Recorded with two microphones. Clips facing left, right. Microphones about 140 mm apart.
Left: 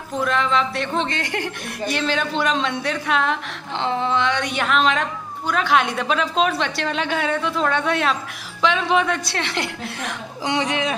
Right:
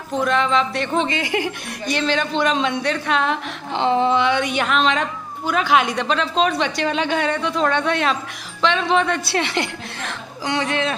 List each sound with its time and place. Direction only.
0.2 s a woman's voice: centre (ahead or behind)
3.7 s a woman's voice: 20° right (ahead or behind)
10.4 s speech: 20° left (ahead or behind)